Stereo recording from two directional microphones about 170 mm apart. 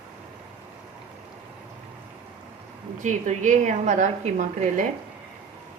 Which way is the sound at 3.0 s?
45° right (ahead or behind).